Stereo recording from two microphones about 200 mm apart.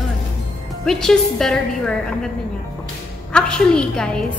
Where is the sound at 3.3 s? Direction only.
5° left (ahead or behind).